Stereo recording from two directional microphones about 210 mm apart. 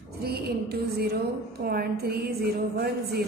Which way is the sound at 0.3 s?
50° right (ahead or behind).